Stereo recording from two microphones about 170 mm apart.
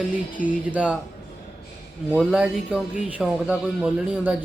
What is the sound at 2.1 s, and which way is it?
Speech, 5° right (ahead or behind).